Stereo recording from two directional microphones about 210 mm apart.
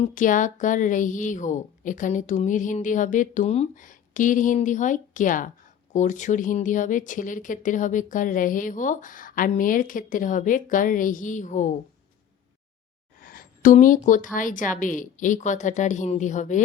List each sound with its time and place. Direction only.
0.0 s speech: 40° left (ahead or behind)
13.2 s a sound: 45° left (ahead or behind)
14.3 s speech: 40° left (ahead or behind)